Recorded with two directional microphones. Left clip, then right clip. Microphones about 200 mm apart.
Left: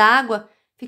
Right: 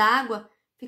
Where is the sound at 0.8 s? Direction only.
40° left (ahead or behind).